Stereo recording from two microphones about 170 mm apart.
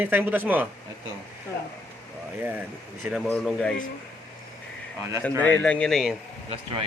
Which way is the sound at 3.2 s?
5° left (ahead or behind).